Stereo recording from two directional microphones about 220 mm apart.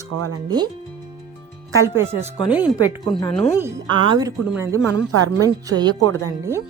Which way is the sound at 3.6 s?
20° right (ahead or behind).